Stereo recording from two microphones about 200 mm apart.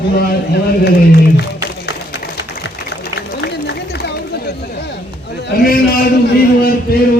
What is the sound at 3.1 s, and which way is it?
Run, 55° left (ahead or behind).